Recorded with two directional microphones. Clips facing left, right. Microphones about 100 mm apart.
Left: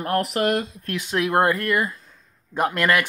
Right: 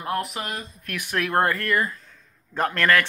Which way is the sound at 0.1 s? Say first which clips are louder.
Left 7 dB; 70° left (ahead or behind).